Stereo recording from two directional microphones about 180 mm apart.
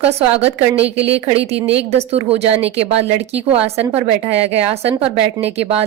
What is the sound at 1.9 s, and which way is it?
A woman's voice, 35° right (ahead or behind).